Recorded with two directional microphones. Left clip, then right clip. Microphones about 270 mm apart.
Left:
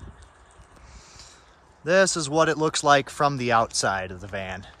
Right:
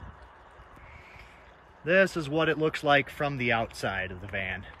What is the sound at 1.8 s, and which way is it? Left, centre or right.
Speech, centre.